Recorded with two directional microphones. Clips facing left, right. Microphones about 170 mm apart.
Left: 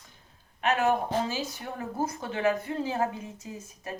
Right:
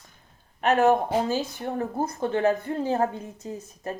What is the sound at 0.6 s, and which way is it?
Speech, 35° right (ahead or behind).